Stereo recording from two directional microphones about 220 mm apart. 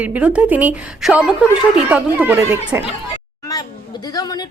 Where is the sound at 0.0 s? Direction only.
5° right (ahead or behind).